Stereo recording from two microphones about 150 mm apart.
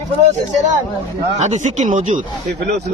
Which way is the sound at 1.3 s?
50° right (ahead or behind).